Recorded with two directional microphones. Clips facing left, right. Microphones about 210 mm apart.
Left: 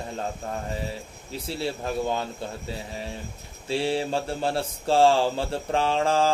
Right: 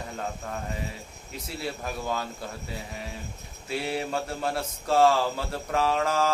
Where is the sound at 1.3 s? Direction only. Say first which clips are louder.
Left 4 dB; 30° left (ahead or behind).